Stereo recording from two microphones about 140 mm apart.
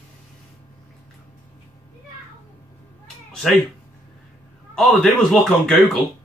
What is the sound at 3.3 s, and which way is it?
Cat, centre (ahead or behind).